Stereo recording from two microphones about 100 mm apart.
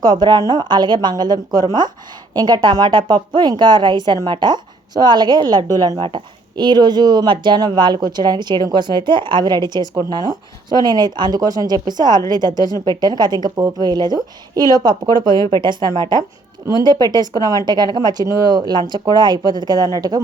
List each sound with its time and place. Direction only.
0.0 s speech: 45° right (ahead or behind)
6.0 s speech: 55° right (ahead or behind); by 20.2 s 40° right (ahead or behind)